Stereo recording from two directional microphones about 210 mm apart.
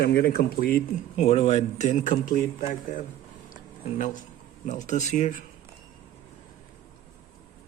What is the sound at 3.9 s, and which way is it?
Speech, 35° left (ahead or behind).